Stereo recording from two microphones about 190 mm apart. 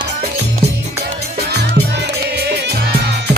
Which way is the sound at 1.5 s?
60° right (ahead or behind).